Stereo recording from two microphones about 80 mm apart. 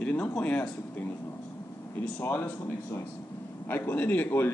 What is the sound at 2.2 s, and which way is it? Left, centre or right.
A man's voice, left.